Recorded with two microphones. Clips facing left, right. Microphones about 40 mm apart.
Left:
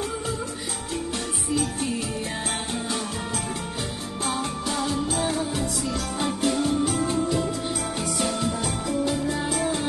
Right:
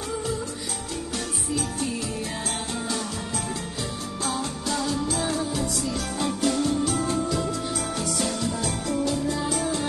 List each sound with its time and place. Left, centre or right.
4.3 s music: left